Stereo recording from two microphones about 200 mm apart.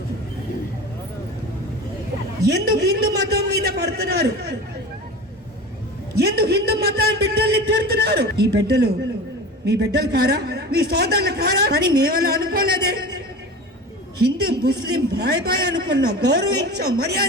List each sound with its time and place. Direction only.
2.5 s a man's voice: 55° right (ahead or behind)
6.1 s a man's voice: 50° right (ahead or behind)
14.2 s a man's voice: 55° right (ahead or behind)